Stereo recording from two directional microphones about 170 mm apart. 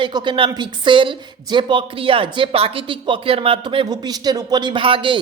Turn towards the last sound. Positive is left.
turn(degrees=-30)  # may be behind; listen again after turning